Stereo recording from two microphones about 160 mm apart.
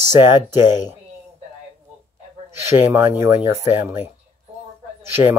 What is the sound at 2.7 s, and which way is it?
Speech, 15° right (ahead or behind).